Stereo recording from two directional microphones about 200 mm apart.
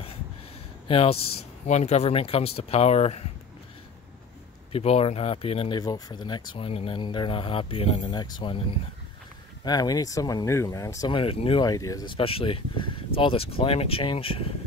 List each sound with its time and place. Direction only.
0.8 s speech: 30° left (ahead or behind)
4.7 s speech: 30° left (ahead or behind)
9.7 s speech: 20° left (ahead or behind)